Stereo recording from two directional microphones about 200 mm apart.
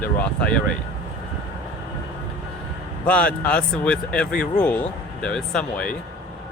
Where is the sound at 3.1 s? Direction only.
5° left (ahead or behind).